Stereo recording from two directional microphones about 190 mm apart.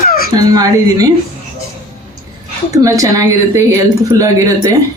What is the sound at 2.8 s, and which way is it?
Speech, 15° right (ahead or behind).